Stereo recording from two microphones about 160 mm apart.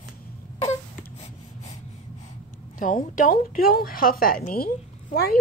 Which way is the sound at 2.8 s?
55° left (ahead or behind).